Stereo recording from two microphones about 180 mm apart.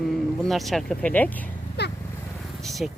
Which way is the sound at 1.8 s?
70° left (ahead or behind).